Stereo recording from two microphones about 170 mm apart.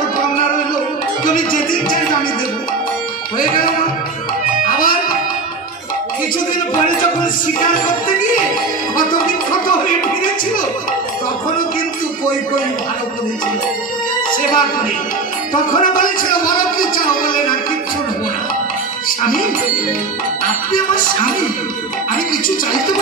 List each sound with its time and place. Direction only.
4.6 s music: 55° left (ahead or behind)
15.5 s a man's voice: 55° left (ahead or behind)